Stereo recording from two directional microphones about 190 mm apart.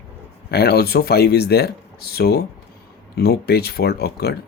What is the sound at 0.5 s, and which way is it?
Speech, 55° left (ahead or behind).